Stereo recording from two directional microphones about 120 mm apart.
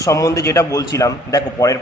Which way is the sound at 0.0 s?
25° left (ahead or behind).